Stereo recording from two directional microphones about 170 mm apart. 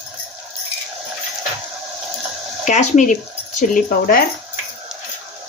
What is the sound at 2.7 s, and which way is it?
Speech, 45° left (ahead or behind).